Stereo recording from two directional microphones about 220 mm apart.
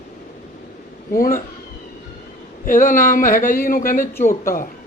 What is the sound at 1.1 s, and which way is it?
Speech, 40° left (ahead or behind).